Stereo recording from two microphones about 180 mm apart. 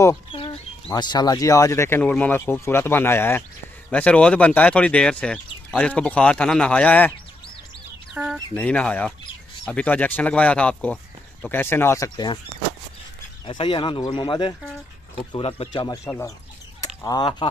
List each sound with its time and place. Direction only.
0.9 s speech: 25° left (ahead or behind)
8.1 s chicken: 5° right (ahead or behind)
8.5 s speech: 5° left (ahead or behind)
13.5 s speech: 30° left (ahead or behind)
16.1 s speech: 15° left (ahead or behind)